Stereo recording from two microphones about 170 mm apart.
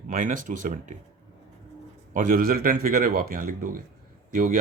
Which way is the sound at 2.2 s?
55° right (ahead or behind).